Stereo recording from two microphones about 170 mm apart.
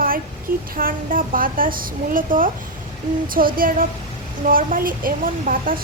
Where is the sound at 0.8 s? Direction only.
55° right (ahead or behind).